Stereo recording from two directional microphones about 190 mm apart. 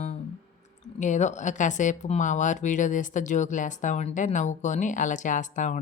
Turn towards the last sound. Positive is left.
turn(degrees=40)  # may be behind; listen again after turning